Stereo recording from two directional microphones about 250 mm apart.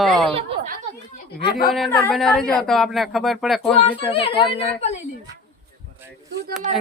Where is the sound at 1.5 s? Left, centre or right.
Left.